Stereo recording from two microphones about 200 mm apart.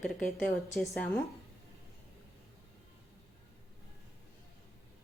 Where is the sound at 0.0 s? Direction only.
Centre (ahead or behind).